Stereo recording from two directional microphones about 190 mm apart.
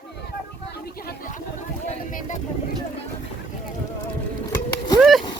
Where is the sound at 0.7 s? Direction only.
50° left (ahead or behind).